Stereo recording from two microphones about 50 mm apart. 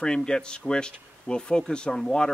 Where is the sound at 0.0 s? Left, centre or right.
Centre.